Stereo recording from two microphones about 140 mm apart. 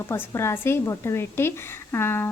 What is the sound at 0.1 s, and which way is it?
A woman's voice, 20° left (ahead or behind).